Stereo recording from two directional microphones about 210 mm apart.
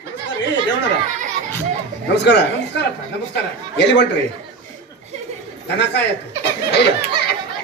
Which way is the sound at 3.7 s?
55° left (ahead or behind).